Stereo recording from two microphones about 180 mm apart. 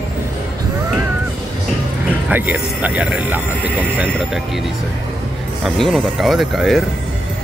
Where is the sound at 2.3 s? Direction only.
10° right (ahead or behind).